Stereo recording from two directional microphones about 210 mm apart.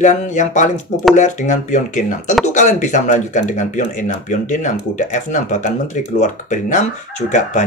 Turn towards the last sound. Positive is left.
turn(degrees=35)  # may be behind; listen again after turning